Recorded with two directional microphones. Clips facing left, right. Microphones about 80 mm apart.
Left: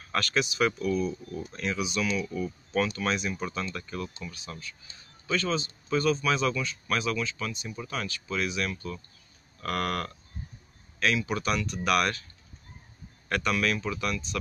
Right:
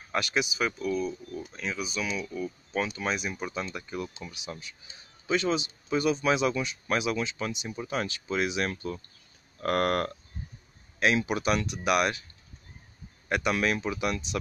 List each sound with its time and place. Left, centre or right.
0.1 s speech: centre; by 10.1 s right
11.2 s speech: centre
13.3 s speech: centre